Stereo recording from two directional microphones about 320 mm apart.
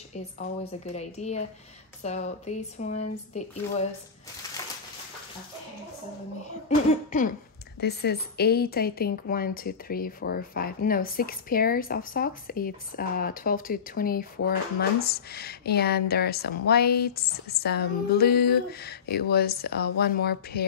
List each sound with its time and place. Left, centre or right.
0.9 s speech: left
7.1 s cough: left
7.8 s speech: left